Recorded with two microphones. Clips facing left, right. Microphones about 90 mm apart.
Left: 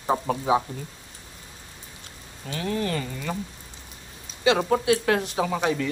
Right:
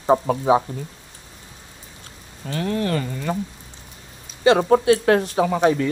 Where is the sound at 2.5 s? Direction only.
55° right (ahead or behind).